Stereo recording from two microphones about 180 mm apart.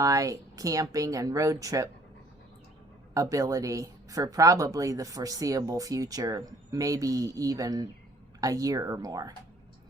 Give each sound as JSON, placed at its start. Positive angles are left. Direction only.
{"t": 0.0, "sound": "a woman's voice", "side_deg": -20}
{"t": 3.2, "sound": "a woman's voice", "side_deg": -20}